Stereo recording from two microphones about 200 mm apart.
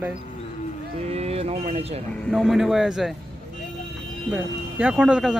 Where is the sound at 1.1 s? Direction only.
30° right (ahead or behind).